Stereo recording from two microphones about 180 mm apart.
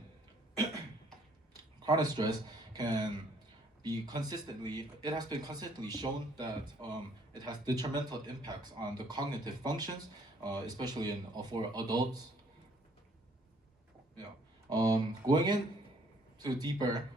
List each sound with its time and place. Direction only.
1.8 s speech: 20° right (ahead or behind)
14.7 s speech: 20° right (ahead or behind)